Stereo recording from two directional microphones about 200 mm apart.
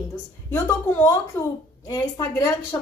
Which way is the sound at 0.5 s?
15° left (ahead or behind).